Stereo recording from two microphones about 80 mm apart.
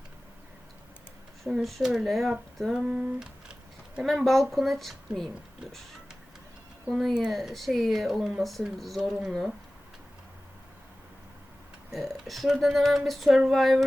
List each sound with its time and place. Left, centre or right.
1.5 s speech: centre
2.8 s a sound: centre
4.0 s speech: centre
7.0 s speech: centre
11.9 s speech: centre